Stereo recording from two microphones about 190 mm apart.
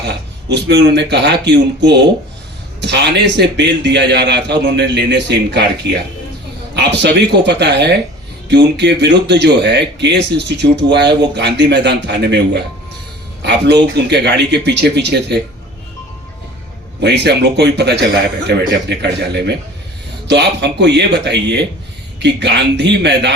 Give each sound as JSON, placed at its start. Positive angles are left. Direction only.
{"t": 0.1, "sound": "speech", "side_deg": -65}
{"t": 6.7, "sound": "speech", "side_deg": -65}
{"t": 13.4, "sound": "speech", "side_deg": -65}
{"t": 17.0, "sound": "speech", "side_deg": -65}